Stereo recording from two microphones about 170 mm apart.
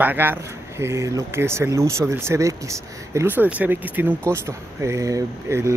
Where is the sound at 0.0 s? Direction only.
10° right (ahead or behind).